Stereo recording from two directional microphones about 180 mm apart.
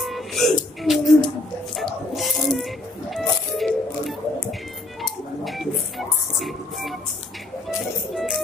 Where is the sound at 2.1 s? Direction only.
Centre (ahead or behind).